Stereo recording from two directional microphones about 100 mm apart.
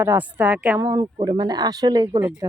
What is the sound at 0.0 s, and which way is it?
Speech, 20° right (ahead or behind).